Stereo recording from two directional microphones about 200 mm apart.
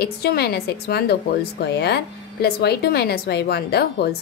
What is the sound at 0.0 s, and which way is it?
Speech, 50° left (ahead or behind).